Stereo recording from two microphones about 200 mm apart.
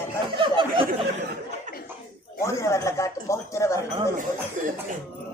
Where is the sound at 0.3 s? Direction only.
25° right (ahead or behind).